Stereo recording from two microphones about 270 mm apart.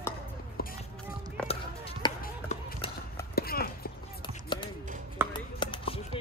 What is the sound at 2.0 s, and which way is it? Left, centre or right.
Run, centre.